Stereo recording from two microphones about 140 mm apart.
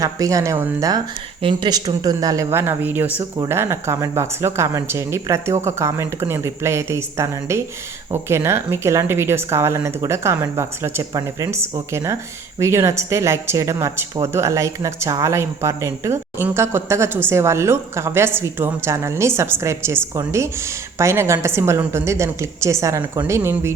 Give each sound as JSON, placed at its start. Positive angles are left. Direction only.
{"t": 0.0, "sound": "speech", "side_deg": -25}
{"t": 1.4, "sound": "speech", "side_deg": -35}